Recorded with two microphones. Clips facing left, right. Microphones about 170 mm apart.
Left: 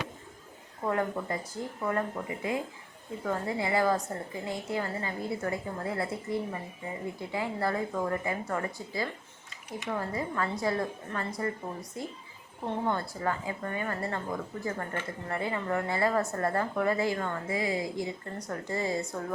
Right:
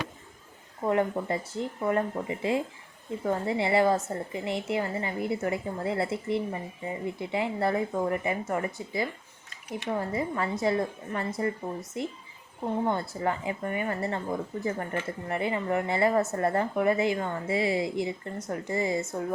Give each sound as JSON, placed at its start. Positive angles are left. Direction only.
{"t": 0.9, "sound": "a woman's voice", "side_deg": -25}